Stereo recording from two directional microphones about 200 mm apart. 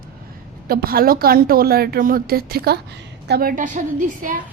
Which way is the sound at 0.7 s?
50° right (ahead or behind).